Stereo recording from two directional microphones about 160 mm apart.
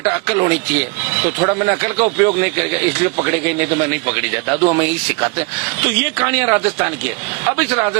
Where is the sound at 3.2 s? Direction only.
10° right (ahead or behind).